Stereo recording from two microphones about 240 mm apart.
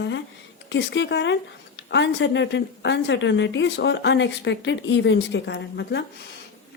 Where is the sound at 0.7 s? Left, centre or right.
Left.